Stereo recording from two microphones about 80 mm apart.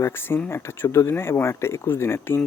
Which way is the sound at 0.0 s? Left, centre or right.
Left.